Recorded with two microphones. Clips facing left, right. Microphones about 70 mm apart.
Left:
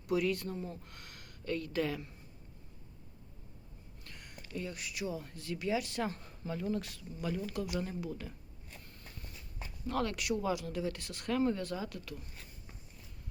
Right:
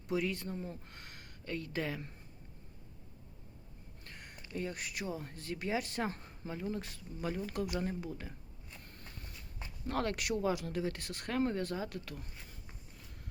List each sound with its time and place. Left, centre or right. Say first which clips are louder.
0.1 s speech: left 3 dB; right
4.0 s speech: even; right
8.8 s a sound: right 1 dB; right
9.8 s speech: left 1 dB; right